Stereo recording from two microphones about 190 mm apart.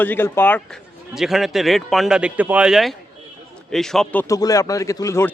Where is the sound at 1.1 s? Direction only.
Centre (ahead or behind).